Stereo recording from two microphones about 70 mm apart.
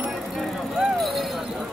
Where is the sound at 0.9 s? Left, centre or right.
Centre.